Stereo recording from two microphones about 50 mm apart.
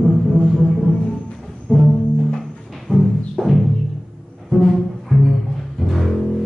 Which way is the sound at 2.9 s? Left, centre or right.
Centre.